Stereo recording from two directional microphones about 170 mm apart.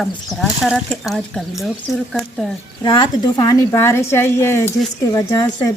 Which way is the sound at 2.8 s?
25° left (ahead or behind).